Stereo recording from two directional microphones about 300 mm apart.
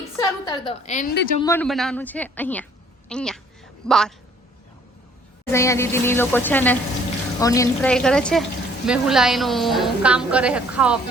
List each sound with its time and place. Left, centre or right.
0.2 s a woman's voice: centre
1.4 s a woman's voice: centre
5.5 s a woman's voice: centre